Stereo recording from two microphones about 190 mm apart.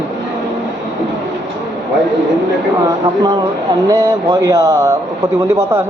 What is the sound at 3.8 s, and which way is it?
Speech, 20° right (ahead or behind).